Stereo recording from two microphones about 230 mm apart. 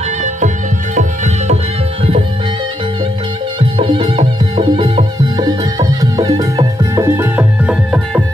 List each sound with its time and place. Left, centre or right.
0.9 s music: right
3.5 s music: right; by 8.2 s centre